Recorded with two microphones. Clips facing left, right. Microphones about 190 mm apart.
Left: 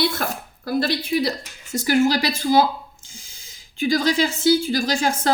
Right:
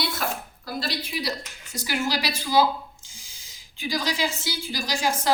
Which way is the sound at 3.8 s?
50° left (ahead or behind).